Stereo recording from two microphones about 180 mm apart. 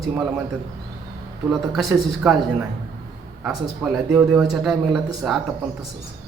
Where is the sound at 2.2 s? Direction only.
5° right (ahead or behind).